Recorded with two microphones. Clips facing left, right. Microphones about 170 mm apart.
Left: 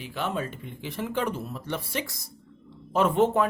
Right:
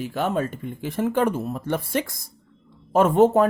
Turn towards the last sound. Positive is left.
turn(degrees=-40)  # may be behind; listen again after turning